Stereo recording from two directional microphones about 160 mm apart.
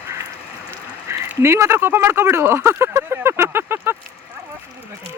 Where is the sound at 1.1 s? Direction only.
15° right (ahead or behind).